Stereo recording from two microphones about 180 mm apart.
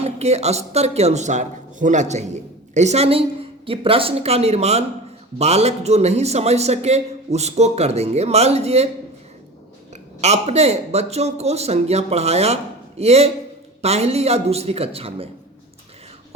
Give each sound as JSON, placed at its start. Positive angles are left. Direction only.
{"t": 0.0, "sound": "a man's voice", "side_deg": -35}
{"t": 9.9, "sound": "a man's voice", "side_deg": -35}